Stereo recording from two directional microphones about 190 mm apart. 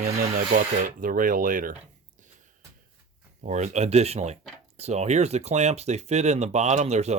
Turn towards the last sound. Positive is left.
turn(degrees=-35)  # may be behind; listen again after turning